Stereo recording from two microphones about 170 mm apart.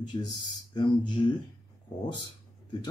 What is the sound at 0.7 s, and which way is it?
Speech, 25° left (ahead or behind).